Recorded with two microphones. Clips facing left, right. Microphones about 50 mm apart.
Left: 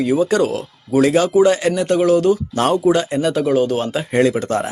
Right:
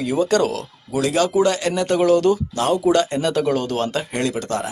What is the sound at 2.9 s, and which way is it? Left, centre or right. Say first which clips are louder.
Speech: left 2 dB; centre.